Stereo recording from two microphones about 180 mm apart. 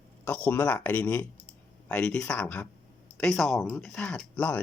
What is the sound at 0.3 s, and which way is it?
Speech, 10° left (ahead or behind).